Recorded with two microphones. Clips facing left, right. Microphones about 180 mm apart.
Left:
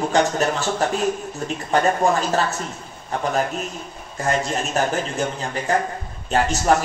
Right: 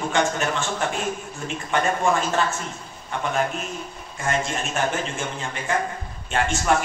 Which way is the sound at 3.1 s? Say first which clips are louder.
Left 2 dB; 40° left (ahead or behind).